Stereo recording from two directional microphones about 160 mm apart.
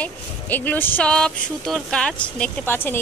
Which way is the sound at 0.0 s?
10° left (ahead or behind).